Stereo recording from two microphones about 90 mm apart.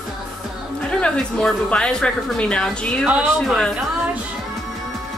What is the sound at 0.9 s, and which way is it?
Speech, 10° left (ahead or behind).